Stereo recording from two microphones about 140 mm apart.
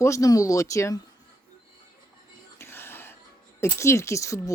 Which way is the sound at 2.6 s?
15° left (ahead or behind).